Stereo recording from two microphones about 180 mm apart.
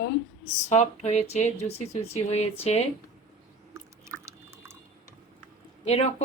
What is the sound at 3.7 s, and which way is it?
Drip, 15° right (ahead or behind).